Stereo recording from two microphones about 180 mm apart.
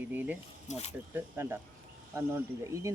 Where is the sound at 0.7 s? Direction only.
35° left (ahead or behind).